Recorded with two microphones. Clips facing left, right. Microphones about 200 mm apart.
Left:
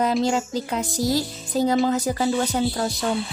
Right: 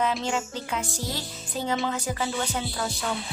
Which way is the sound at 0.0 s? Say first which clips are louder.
Left 6 dB; 40° left (ahead or behind).